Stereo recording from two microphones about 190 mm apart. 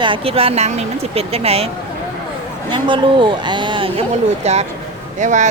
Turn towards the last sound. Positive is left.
turn(degrees=-40)  # may be behind; listen again after turning